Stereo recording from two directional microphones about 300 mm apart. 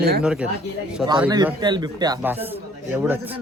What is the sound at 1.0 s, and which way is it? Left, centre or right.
A man's voice, centre.